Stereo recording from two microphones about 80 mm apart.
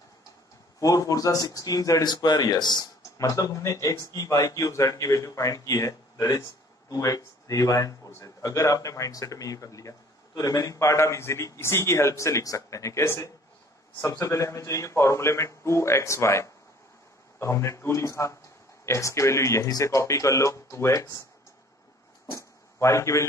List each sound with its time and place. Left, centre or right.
0.7 s a man's voice: left
2.0 s speech: left
3.2 s a man's voice: left
22.3 s a sound: left